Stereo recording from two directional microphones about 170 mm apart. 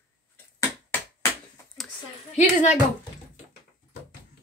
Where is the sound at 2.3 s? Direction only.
45° left (ahead or behind).